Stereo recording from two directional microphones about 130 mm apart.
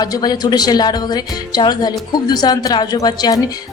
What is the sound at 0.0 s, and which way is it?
A woman's voice, 30° left (ahead or behind).